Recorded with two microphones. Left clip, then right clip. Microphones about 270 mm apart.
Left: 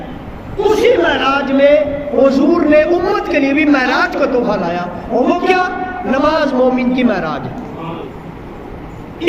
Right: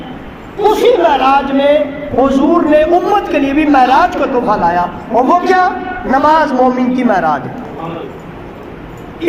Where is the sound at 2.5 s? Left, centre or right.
Centre.